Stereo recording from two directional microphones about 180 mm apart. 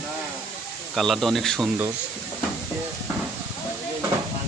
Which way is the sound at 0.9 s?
Centre (ahead or behind).